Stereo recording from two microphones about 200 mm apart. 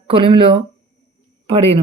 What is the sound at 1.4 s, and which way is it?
Speech, 30° right (ahead or behind).